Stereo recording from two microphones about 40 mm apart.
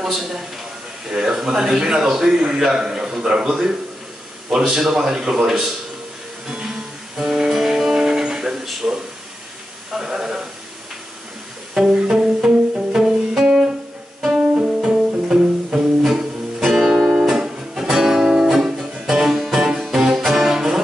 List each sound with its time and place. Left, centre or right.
0.0 s a man's voice: centre
6.4 s music: centre
8.6 s speech: centre
11.7 s music: centre